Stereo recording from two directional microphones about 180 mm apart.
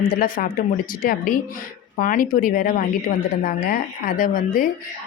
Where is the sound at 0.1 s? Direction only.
50° left (ahead or behind).